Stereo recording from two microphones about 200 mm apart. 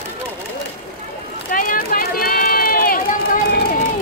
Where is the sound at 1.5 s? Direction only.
45° left (ahead or behind).